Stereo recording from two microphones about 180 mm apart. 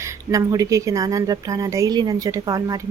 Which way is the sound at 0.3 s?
20° right (ahead or behind).